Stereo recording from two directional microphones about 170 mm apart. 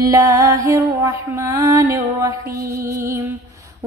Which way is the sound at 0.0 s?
20° right (ahead or behind).